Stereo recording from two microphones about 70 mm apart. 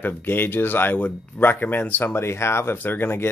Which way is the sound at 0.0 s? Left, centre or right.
Left.